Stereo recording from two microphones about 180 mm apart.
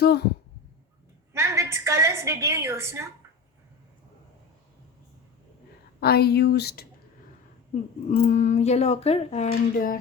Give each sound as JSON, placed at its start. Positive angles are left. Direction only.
{"t": 0.0, "sound": "speech", "side_deg": 65}
{"t": 1.3, "sound": "a woman's voice", "side_deg": -15}
{"t": 6.0, "sound": "speech", "side_deg": 60}
{"t": 8.1, "sound": "speech", "side_deg": 40}
{"t": 9.5, "sound": "speech", "side_deg": 55}